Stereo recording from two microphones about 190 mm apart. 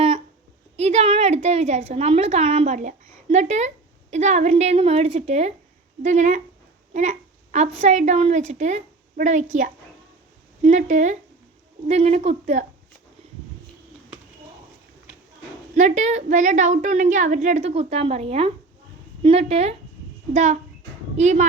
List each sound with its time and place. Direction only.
0.8 s a woman's voice: 35° right (ahead or behind)
6.9 s babbling: 40° right (ahead or behind)
7.8 s a woman's voice: 40° right (ahead or behind)
15.7 s a woman's voice: 35° right (ahead or behind)